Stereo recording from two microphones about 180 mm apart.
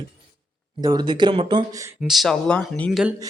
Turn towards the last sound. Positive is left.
turn(degrees=5)  # may be behind; listen again after turning